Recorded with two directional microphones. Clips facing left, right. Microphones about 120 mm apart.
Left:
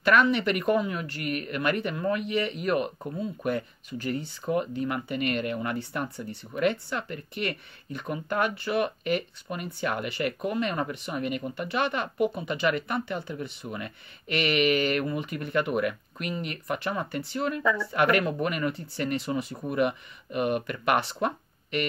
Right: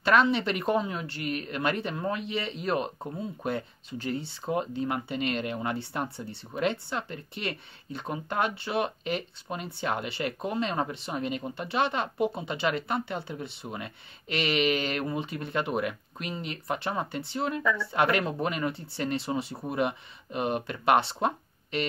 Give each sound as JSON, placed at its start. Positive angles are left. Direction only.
{"t": 0.0, "sound": "speech", "side_deg": -25}